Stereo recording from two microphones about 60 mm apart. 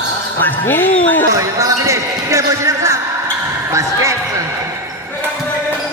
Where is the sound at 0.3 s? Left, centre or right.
Left.